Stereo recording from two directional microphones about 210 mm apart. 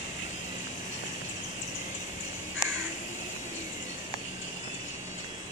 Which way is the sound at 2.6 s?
15° left (ahead or behind).